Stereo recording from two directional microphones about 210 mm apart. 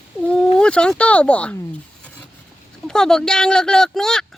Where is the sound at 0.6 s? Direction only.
5° left (ahead or behind).